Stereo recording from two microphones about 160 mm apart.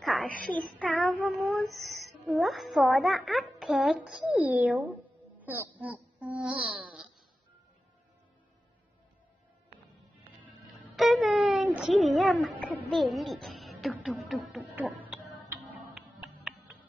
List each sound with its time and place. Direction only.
0.0 s speech: 5° left (ahead or behind)
11.0 s a child's voice: centre (ahead or behind)
15.9 s music: 5° right (ahead or behind)